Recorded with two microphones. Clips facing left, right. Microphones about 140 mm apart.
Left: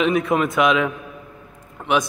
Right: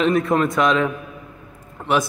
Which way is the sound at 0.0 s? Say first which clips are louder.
Right 1 dB; centre (ahead or behind).